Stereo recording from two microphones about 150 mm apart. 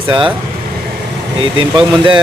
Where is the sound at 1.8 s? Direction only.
35° right (ahead or behind).